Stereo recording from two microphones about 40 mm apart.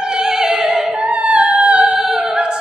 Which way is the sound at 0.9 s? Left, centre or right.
Right.